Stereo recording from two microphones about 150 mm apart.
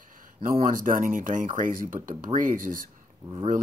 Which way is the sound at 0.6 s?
65° right (ahead or behind).